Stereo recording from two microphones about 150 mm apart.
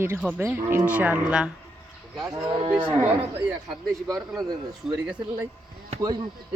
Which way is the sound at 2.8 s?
15° right (ahead or behind).